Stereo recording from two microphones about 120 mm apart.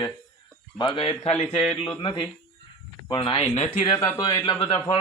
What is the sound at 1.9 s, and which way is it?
Speech, 45° left (ahead or behind).